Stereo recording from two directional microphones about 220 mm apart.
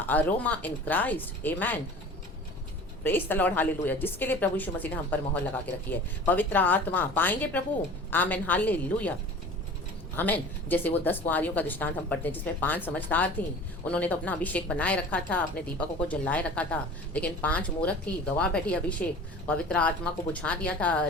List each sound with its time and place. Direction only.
0.1 s speech: 10° left (ahead or behind)
3.0 s speech: 10° left (ahead or behind)
10.2 s speech: 10° left (ahead or behind)